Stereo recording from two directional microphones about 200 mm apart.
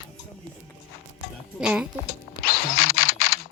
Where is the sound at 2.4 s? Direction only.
50° left (ahead or behind).